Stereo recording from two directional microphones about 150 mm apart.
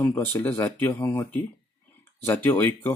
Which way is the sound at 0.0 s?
15° left (ahead or behind).